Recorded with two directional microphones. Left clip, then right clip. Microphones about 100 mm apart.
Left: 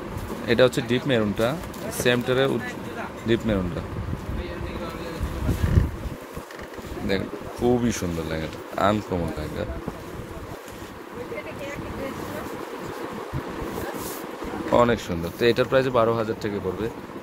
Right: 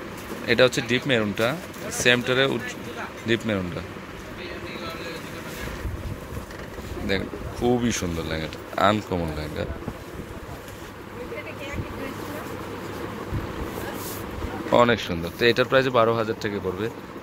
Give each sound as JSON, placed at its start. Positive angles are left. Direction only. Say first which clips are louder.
{"t": 0.5, "sound": "speech", "louder": "even", "side_deg": 15}
{"t": 7.1, "sound": "speech", "louder": "even", "side_deg": 10}
{"t": 14.9, "sound": "speech", "louder": "right 1 dB", "side_deg": 20}
{"t": 15.3, "sound": "speech", "louder": "right 1 dB", "side_deg": 5}